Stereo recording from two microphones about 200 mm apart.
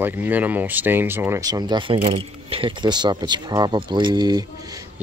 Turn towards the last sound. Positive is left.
turn(degrees=-20)  # may be behind; listen again after turning